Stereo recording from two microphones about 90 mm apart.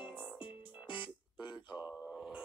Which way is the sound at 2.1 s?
Centre (ahead or behind).